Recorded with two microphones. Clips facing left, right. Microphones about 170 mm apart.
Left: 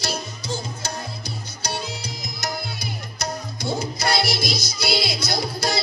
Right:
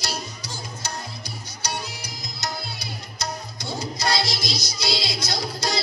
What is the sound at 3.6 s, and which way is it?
Music, 20° left (ahead or behind).